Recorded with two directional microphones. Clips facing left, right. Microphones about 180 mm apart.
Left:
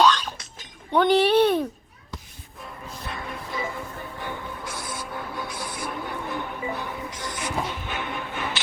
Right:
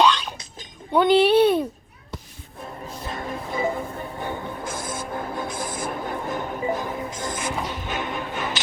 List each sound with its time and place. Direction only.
0.9 s speech: 10° right (ahead or behind)
2.6 s a capella: 30° right (ahead or behind)
3.1 s music: 45° right (ahead or behind)
4.4 s music: 45° right (ahead or behind)